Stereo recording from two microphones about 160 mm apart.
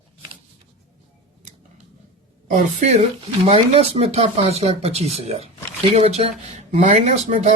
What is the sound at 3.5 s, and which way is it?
Speech, 35° right (ahead or behind).